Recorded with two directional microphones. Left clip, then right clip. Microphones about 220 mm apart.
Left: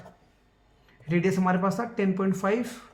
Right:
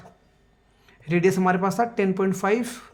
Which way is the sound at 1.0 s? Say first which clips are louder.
Right 5 dB; 40° right (ahead or behind).